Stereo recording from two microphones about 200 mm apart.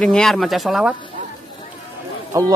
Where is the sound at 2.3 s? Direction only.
15° right (ahead or behind).